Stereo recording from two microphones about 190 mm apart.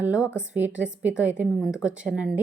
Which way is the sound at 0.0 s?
5° right (ahead or behind).